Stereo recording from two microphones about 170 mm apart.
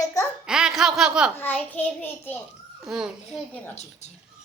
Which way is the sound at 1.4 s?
10° left (ahead or behind).